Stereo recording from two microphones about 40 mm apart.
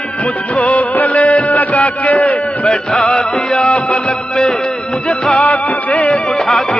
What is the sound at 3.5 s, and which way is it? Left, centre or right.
Music, left.